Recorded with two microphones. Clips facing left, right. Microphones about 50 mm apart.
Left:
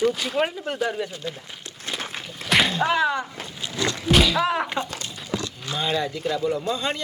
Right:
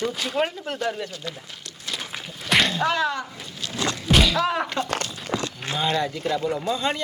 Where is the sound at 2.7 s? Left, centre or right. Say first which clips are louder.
Left 2 dB; centre.